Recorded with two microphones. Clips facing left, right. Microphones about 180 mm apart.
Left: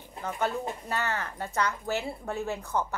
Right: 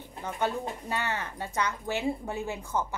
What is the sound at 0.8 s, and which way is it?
A woman's voice, 15° right (ahead or behind).